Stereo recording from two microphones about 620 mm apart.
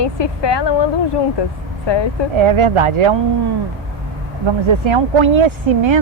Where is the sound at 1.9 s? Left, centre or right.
Left.